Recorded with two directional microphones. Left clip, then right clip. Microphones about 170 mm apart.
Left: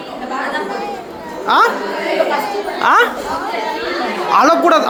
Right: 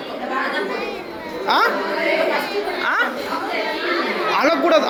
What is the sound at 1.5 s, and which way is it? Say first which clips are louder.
Speech: left 5 dB; 30° left (ahead or behind).